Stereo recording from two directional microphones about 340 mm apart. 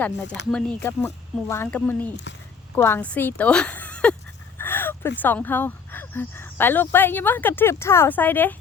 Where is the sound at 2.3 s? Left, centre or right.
Left.